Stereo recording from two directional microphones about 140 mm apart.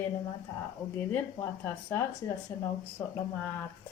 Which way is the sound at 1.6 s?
15° left (ahead or behind).